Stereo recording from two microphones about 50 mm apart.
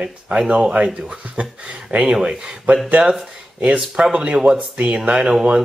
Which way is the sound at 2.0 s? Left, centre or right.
Centre.